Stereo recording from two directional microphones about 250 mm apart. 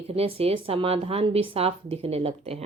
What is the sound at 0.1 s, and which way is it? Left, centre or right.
A woman's voice, right.